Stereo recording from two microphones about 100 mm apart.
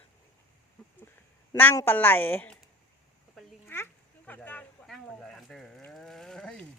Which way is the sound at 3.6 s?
20° left (ahead or behind).